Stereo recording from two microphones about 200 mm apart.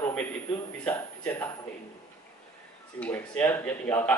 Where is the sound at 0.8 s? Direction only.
10° left (ahead or behind).